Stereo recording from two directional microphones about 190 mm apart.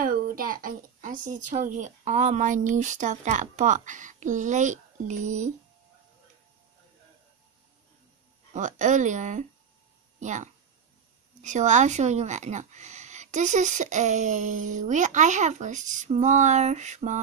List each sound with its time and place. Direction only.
0.0 s speech: 45° right (ahead or behind)
8.5 s speech: 40° right (ahead or behind)